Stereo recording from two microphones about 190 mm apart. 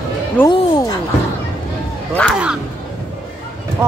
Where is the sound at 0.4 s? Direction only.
10° left (ahead or behind).